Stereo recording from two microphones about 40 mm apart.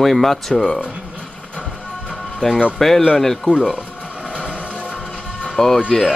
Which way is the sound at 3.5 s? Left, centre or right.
Left.